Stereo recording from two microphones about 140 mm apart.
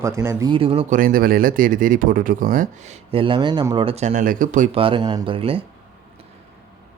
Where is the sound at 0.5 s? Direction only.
40° right (ahead or behind).